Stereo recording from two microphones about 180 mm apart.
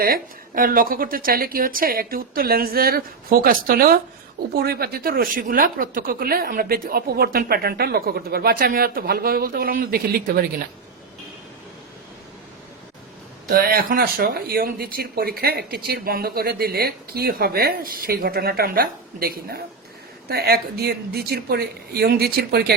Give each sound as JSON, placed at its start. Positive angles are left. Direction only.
{"t": 0.0, "sound": "speech", "side_deg": -50}
{"t": 13.5, "sound": "speech", "side_deg": -55}